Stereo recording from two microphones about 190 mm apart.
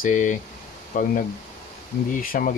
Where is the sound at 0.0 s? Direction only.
40° left (ahead or behind).